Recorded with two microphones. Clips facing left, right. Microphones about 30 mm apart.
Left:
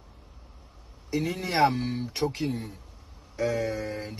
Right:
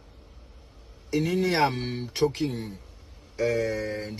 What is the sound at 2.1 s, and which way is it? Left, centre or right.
Speech, right.